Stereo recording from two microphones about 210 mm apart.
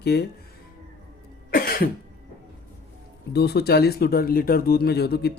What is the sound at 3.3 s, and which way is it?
Speech, 50° left (ahead or behind).